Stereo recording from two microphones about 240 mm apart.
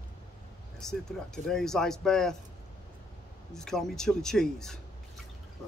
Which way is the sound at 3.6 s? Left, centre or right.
Centre.